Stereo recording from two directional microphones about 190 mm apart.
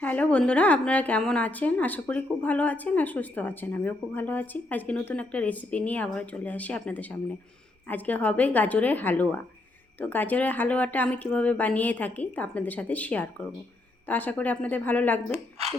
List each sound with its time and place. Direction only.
0.0 s a woman's voice: 10° left (ahead or behind)
15.3 s a woman's voice: 35° right (ahead or behind)